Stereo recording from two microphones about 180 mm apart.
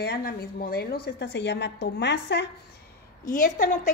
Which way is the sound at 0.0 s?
60° left (ahead or behind).